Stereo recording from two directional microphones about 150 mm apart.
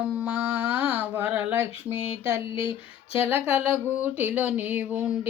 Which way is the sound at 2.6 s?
35° left (ahead or behind).